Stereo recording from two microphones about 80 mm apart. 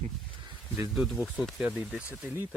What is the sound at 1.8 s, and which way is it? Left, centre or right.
Speech, centre.